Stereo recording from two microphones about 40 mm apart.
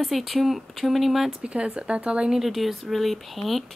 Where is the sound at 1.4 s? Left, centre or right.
Right.